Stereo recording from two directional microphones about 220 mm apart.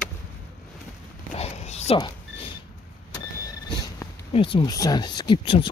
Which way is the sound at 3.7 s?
20° left (ahead or behind).